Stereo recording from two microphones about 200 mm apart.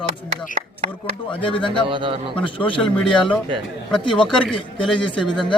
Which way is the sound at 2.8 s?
5° left (ahead or behind).